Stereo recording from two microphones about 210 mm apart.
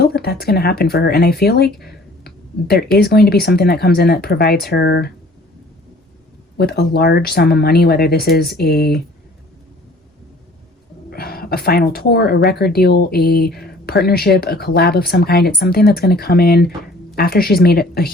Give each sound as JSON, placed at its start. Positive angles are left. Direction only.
{"t": 0.0, "sound": "speech", "side_deg": 50}
{"t": 6.6, "sound": "speech", "side_deg": 50}
{"t": 11.1, "sound": "speech", "side_deg": 45}